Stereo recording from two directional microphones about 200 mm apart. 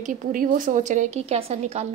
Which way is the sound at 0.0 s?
40° right (ahead or behind).